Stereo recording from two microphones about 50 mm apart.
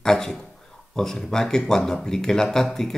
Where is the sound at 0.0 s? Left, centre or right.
Centre.